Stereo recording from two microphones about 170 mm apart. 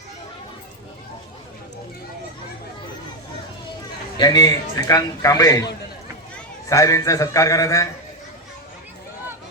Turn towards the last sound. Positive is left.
turn(degrees=20)  # may be behind; listen again after turning